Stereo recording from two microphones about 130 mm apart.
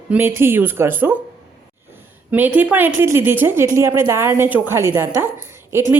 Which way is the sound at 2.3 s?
15° right (ahead or behind).